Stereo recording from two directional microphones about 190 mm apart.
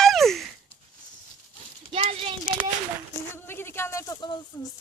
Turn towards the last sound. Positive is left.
turn(degrees=20)  # may be behind; listen again after turning